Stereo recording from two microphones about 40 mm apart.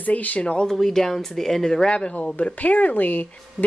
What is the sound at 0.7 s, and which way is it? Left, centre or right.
Speech, centre.